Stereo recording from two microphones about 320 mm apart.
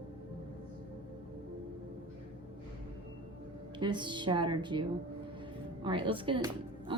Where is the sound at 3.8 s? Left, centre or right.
Centre.